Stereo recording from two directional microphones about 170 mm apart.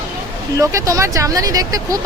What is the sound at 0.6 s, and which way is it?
Speech, 20° right (ahead or behind).